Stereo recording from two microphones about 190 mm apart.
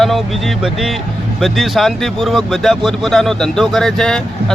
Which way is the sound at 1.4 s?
Centre (ahead or behind).